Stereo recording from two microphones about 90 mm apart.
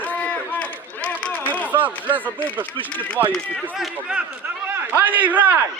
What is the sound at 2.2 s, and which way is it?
Speech, 15° left (ahead or behind).